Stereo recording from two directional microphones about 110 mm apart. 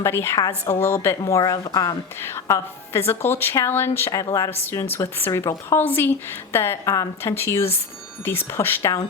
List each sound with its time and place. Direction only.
0.0 s a woman's voice: 25° left (ahead or behind)
2.2 s a woman's voice: 25° left (ahead or behind)